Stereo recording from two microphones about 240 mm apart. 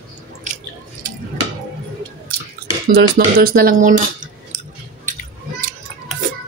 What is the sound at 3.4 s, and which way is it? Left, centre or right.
Speech, right.